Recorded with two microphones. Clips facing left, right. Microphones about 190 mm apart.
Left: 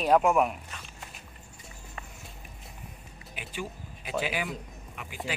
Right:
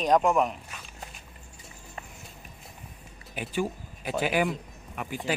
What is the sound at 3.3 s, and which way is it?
Speech, 40° right (ahead or behind).